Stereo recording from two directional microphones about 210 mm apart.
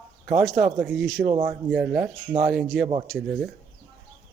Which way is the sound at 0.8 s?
Centre (ahead or behind).